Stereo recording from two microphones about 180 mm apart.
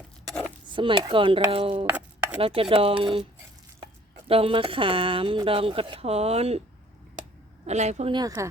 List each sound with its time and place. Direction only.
0.7 s speech: 25° right (ahead or behind)
1.9 s chopping: 10° right (ahead or behind)
2.4 s speech: 30° right (ahead or behind)
4.3 s speech: 30° right (ahead or behind)
7.6 s speech: 40° right (ahead or behind)
8.1 s speech: 20° right (ahead or behind)